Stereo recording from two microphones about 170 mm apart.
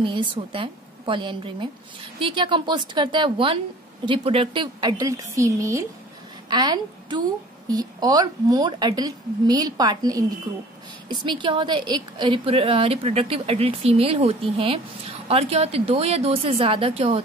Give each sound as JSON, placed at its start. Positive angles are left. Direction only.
{"t": 0.0, "sound": "a woman's voice", "side_deg": -30}